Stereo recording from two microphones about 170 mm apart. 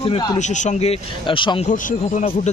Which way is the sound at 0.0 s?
25° left (ahead or behind).